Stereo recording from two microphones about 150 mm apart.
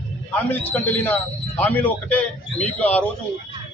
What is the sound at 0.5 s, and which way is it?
A man's voice, 10° left (ahead or behind).